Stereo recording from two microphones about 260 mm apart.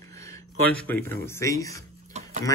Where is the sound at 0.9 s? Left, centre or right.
Centre.